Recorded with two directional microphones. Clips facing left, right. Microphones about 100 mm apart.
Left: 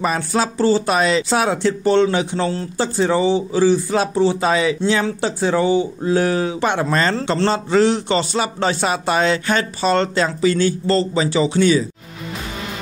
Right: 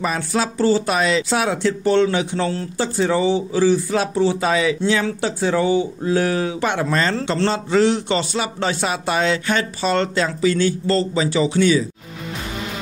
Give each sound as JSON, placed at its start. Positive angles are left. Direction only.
{"t": 0.0, "sound": "speech", "side_deg": 35}